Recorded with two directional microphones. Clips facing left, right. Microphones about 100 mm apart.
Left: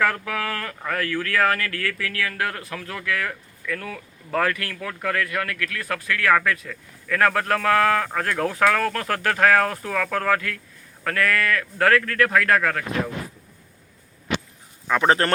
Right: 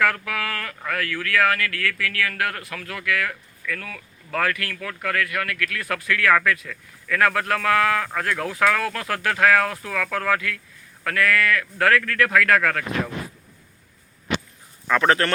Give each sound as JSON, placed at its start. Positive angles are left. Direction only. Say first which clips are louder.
{"t": 0.0, "sound": "speech", "louder": "even", "side_deg": 30}
{"t": 15.0, "sound": "speech", "louder": "left 1 dB", "side_deg": 30}